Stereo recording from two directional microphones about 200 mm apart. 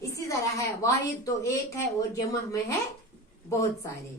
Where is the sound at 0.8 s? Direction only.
15° left (ahead or behind).